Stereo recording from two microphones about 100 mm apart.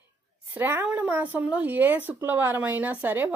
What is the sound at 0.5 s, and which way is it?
Speech, 20° right (ahead or behind).